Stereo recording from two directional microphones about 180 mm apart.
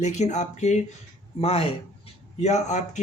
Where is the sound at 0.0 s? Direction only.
40° left (ahead or behind).